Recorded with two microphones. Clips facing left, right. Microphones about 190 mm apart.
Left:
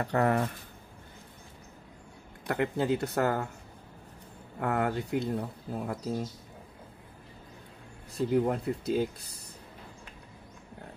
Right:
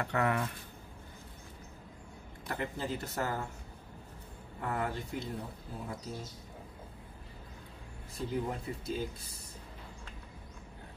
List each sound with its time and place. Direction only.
0.0 s speech: 35° left (ahead or behind)
2.4 s speech: 70° left (ahead or behind)
4.6 s speech: 70° left (ahead or behind)
8.3 s speech: 65° left (ahead or behind)